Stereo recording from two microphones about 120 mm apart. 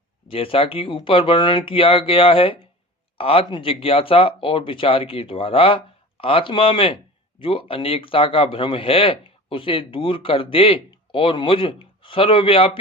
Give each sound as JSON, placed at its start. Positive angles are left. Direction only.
{"t": 0.3, "sound": "speech", "side_deg": 50}